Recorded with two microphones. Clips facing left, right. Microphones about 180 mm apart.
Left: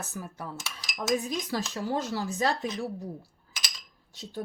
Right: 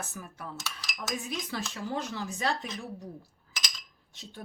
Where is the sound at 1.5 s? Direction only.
40° left (ahead or behind).